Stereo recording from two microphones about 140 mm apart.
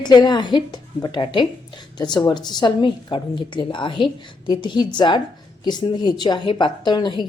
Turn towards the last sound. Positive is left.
turn(degrees=35)  # may be behind; listen again after turning